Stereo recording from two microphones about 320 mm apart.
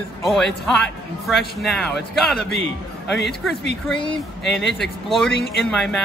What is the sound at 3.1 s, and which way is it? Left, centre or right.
Speech, left.